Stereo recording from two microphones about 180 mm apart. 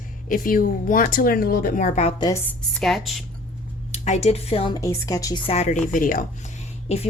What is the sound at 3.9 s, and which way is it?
Speech, 40° left (ahead or behind).